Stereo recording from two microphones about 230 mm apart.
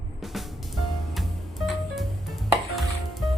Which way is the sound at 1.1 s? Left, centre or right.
Centre.